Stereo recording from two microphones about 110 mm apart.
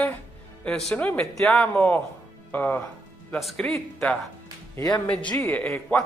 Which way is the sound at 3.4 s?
5° left (ahead or behind).